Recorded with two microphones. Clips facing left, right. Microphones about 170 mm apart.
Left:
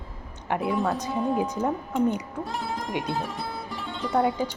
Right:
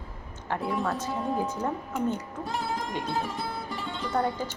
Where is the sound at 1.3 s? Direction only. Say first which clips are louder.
Left 3 dB; 15° left (ahead or behind).